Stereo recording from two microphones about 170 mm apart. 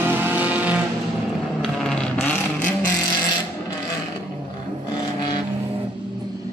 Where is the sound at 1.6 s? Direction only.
5° left (ahead or behind).